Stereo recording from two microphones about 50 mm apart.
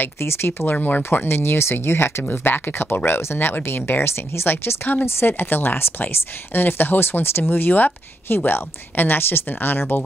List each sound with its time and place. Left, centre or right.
0.0 s speech: left
0.8 s speech: left
1.2 s speech: left